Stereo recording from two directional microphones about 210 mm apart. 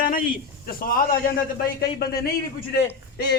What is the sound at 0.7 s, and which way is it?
Speech, 45° left (ahead or behind).